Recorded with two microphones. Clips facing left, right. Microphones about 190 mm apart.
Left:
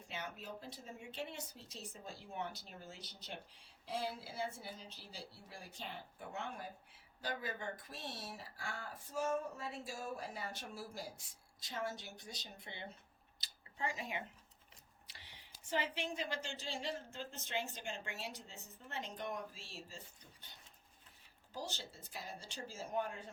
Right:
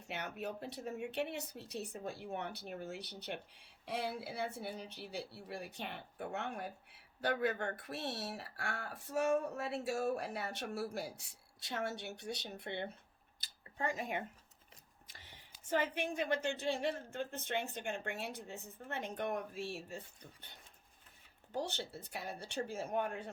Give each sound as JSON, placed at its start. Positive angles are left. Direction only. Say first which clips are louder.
{"t": 0.1, "sound": "speech", "louder": "right 5 dB", "side_deg": -65}
{"t": 21.5, "sound": "speech", "louder": "right 7 dB", "side_deg": -60}